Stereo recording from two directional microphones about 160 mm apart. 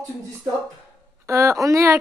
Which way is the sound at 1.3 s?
20° right (ahead or behind).